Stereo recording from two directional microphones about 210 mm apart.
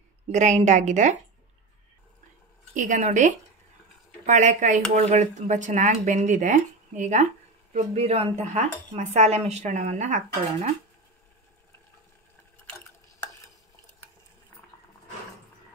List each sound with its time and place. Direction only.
0.3 s speech: 35° right (ahead or behind)
2.7 s speech: 35° right (ahead or behind)